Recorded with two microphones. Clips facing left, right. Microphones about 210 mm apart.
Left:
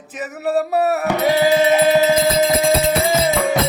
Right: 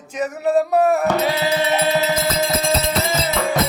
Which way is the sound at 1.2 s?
45° left (ahead or behind).